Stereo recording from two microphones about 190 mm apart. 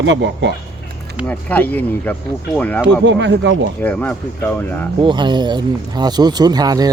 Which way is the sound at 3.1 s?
70° right (ahead or behind).